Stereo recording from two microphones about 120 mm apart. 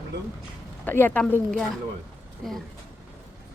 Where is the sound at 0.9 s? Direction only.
15° left (ahead or behind).